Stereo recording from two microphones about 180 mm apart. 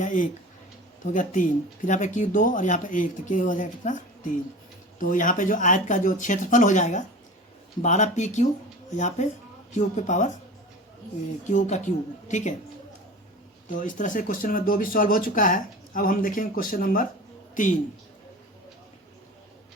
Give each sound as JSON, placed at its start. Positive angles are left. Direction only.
{"t": 0.0, "sound": "speech", "side_deg": 45}
{"t": 11.4, "sound": "speech", "side_deg": 40}
{"t": 13.7, "sound": "speech", "side_deg": 45}